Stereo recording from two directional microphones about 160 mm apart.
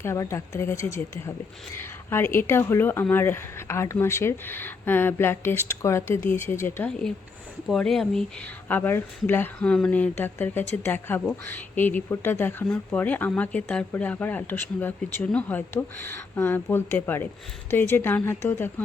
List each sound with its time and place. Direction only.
0.0 s speech: 15° left (ahead or behind)
7.7 s speech: centre (ahead or behind)